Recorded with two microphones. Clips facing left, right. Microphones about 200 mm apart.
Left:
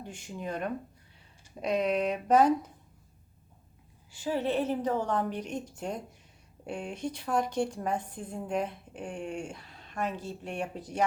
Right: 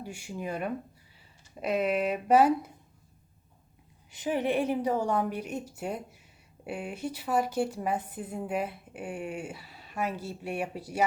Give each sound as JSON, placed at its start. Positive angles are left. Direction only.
{"t": 0.0, "sound": "a woman's voice", "side_deg": -10}
{"t": 4.1, "sound": "a woman's voice", "side_deg": -20}